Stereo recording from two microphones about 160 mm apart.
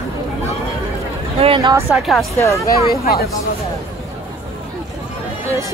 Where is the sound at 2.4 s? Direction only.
20° left (ahead or behind).